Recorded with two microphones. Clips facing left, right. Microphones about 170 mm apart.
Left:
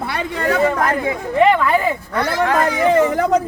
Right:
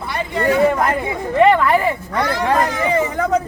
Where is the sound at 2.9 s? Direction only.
80° left.